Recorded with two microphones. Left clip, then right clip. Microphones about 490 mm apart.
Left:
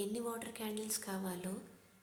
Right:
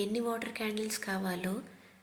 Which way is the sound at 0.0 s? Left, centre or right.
Left.